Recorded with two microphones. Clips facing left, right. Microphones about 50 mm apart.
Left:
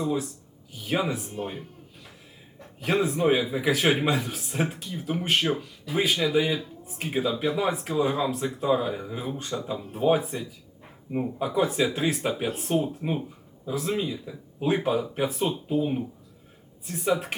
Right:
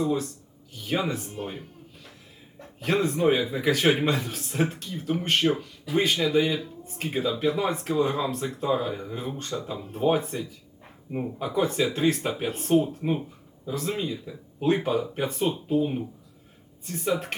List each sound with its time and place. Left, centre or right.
0.0 s speech: centre